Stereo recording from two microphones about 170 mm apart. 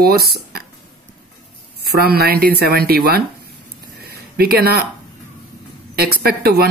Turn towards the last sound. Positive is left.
turn(degrees=-65)  # may be behind; listen again after turning